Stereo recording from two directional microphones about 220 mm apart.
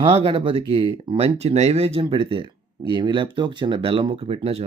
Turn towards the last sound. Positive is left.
turn(degrees=-25)  # may be behind; listen again after turning